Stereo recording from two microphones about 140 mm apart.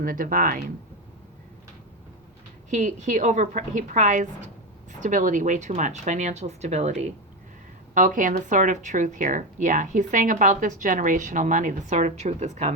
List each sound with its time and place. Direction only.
0.0 s speech: 80° right
2.6 s a woman's voice: 60° right (ahead or behind)
7.9 s a woman's voice: 70° right (ahead or behind); by 12.7 s 55° right (ahead or behind)